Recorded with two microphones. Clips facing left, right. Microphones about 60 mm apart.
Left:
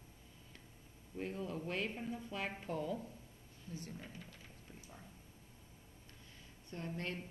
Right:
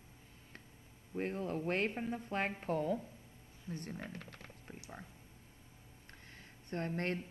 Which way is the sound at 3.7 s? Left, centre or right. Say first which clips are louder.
Right 5 dB; right.